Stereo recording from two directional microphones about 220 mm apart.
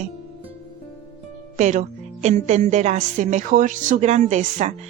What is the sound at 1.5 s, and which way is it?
A woman's voice, 35° right (ahead or behind).